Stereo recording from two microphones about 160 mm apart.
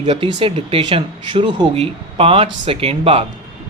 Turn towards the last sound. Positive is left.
turn(degrees=-35)  # may be behind; listen again after turning